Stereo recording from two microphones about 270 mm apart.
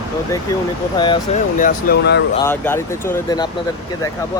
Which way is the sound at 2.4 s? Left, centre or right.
Centre.